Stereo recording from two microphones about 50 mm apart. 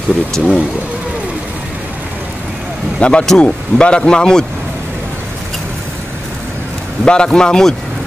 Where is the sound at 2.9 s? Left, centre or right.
Left.